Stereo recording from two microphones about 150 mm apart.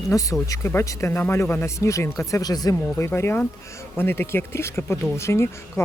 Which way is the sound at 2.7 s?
10° left (ahead or behind).